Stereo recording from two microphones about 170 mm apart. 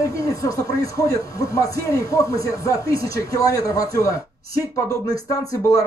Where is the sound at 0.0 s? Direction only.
20° left (ahead or behind).